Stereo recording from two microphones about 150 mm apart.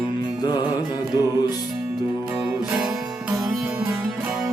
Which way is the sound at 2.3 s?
5° right (ahead or behind).